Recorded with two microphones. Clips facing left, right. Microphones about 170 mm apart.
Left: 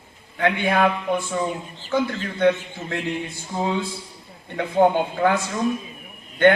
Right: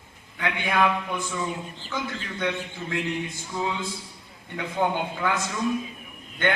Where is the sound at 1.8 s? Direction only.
40° left (ahead or behind).